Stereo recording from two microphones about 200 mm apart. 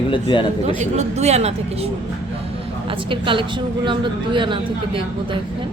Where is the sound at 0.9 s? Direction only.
35° right (ahead or behind).